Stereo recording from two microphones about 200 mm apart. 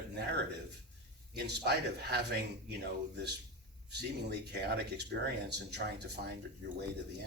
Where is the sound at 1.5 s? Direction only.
55° right (ahead or behind).